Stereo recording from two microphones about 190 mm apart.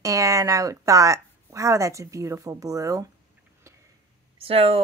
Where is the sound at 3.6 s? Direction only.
15° right (ahead or behind).